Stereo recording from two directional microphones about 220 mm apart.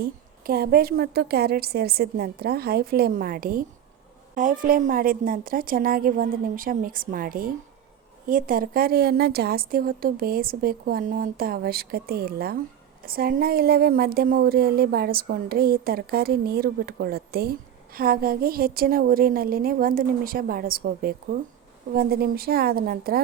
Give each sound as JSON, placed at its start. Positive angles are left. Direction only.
{"t": 0.0, "sound": "a woman's voice", "side_deg": -40}